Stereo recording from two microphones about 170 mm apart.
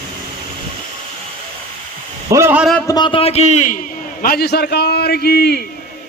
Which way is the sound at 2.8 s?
25° left (ahead or behind).